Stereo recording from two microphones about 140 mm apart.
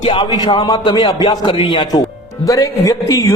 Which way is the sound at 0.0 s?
40° left (ahead or behind).